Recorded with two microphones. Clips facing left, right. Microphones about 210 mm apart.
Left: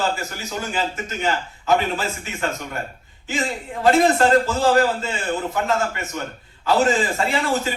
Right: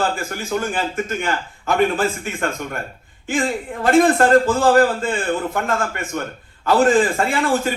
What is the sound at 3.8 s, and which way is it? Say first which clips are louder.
A man's voice: right 2 dB; 50° right (ahead or behind).